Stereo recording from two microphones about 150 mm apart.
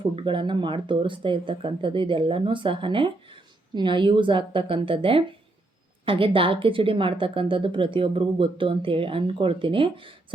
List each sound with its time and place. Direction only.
0.2 s speech: 35° right (ahead or behind)